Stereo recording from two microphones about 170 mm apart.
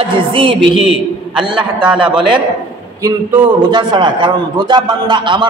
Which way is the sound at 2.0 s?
30° right (ahead or behind).